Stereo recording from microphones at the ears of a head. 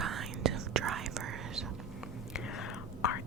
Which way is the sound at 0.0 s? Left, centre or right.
Right.